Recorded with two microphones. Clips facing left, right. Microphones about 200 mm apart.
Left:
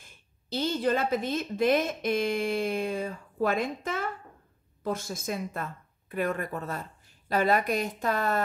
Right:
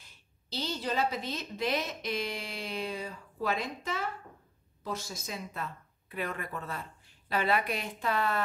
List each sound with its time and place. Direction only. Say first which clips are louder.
0.0 s a woman's voice: left 5 dB; 50° left (ahead or behind)